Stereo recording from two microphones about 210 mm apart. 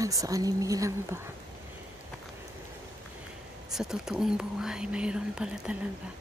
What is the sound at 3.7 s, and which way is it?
Speech, centre (ahead or behind).